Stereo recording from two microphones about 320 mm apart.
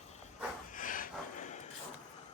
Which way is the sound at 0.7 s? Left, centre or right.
Left.